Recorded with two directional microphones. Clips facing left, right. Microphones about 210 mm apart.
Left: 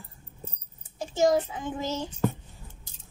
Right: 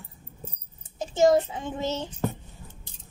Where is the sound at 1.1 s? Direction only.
25° right (ahead or behind).